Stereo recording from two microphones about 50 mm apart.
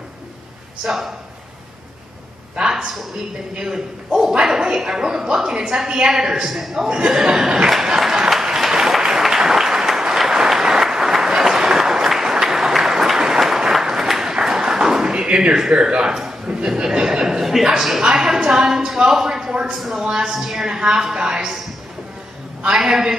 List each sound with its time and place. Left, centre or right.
0.8 s speech: centre
2.5 s a sound: centre
3.5 s a woman's voice: centre
8.1 s applause: centre
15.5 s a woman's voice: centre
19.7 s a woman's voice: centre
22.8 s a woman's voice: centre